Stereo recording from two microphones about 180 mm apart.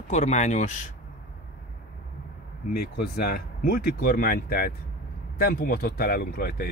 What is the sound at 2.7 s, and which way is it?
Speech, 55° left (ahead or behind).